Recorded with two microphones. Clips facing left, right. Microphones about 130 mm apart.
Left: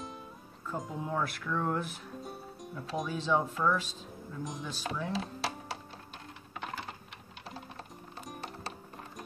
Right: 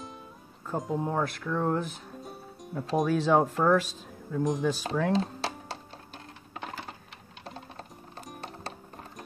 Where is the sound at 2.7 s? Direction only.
55° right (ahead or behind).